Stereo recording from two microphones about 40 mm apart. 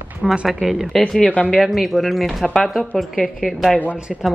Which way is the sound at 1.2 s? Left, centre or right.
Left.